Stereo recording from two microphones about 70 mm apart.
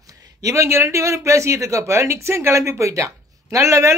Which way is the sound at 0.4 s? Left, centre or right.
Right.